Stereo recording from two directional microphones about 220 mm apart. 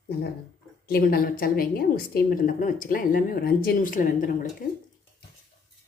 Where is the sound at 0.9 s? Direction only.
40° left (ahead or behind).